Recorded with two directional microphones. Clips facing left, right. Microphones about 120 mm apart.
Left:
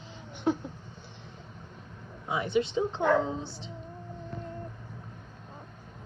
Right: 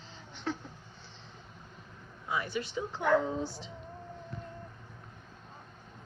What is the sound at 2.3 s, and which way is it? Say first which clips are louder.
Speech: left 6 dB; 20° left (ahead or behind).